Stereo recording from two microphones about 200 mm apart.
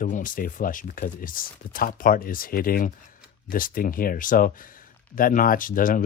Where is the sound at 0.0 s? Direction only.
40° left (ahead or behind).